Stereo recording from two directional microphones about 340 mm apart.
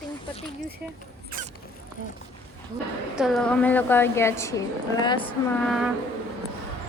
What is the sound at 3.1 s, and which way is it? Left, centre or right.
A woman's voice, centre.